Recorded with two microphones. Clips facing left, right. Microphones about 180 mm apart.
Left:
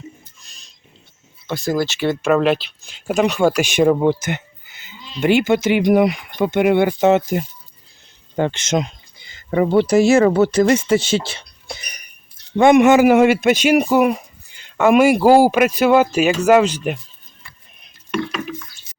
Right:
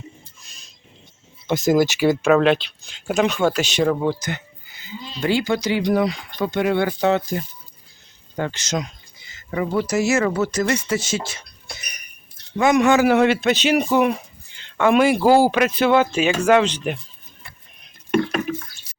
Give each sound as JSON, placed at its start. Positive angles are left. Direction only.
{"t": 1.5, "sound": "speech", "side_deg": -20}
{"t": 2.3, "sound": "speech", "side_deg": 5}
{"t": 12.5, "sound": "speech", "side_deg": 30}
{"t": 12.8, "sound": "speech", "side_deg": 10}
{"t": 18.1, "sound": "a sound", "side_deg": -50}
{"t": 18.9, "sound": "a sound", "side_deg": 20}